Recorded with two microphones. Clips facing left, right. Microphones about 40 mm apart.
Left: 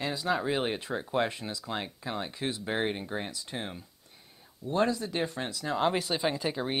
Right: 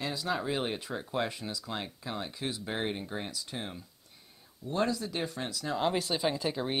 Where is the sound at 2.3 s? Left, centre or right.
Left.